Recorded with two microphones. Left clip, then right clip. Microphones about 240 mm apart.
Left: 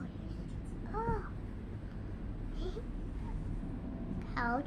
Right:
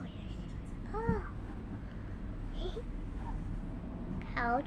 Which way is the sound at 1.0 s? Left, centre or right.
Right.